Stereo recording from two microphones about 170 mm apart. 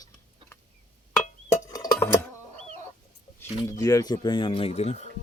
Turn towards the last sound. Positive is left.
turn(degrees=40)  # may be behind; listen again after turning